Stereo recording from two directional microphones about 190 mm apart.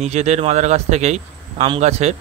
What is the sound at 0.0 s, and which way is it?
Speech, 35° right (ahead or behind).